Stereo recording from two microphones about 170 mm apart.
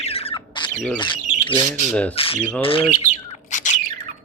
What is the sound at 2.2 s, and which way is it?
Speech, 35° left (ahead or behind).